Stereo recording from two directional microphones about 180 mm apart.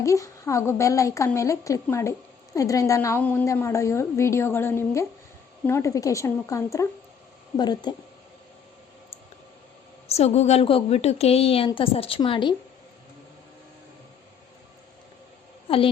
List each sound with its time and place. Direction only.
0.0 s a woman's voice: 15° left (ahead or behind)
10.1 s a woman's voice: 35° left (ahead or behind)